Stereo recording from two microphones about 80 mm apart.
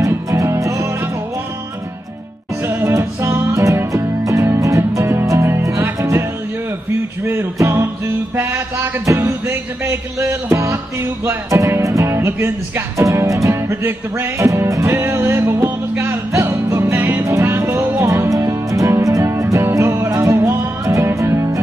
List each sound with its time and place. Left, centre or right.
0.0 s music: right
2.6 s music: right
7.5 s music: right
11.0 s speech: right
13.5 s music: right